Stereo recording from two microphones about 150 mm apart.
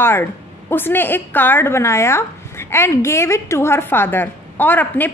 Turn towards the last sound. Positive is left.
turn(degrees=10)  # may be behind; listen again after turning